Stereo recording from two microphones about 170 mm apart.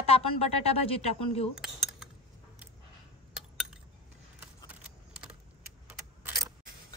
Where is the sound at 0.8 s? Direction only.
35° left (ahead or behind).